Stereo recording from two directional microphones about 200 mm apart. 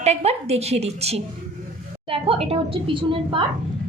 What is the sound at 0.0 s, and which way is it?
A woman's voice, 30° right (ahead or behind).